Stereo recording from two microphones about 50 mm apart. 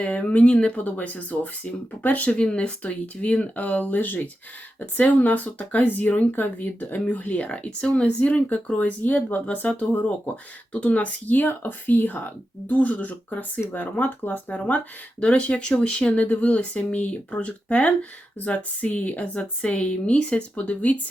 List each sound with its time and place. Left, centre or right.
0.0 s speech: left
2.4 s speech: centre
15.2 s speech: left